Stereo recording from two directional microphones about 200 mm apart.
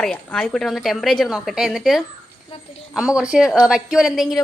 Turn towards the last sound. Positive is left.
turn(degrees=0)  # may be behind; listen again after turning